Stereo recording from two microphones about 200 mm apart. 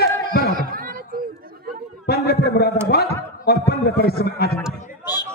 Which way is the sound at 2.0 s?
55° left (ahead or behind).